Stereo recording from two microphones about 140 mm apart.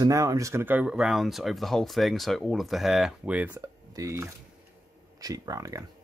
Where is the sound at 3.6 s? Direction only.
20° right (ahead or behind).